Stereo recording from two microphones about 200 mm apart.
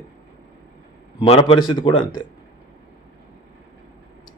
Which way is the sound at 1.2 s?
30° left (ahead or behind).